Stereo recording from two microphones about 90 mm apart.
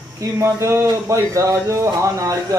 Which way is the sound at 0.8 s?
35° right (ahead or behind).